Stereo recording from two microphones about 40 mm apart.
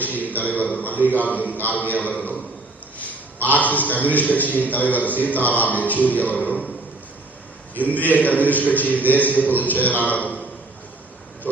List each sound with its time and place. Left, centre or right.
0.0 s a man's voice: left
7.8 s a man's voice: left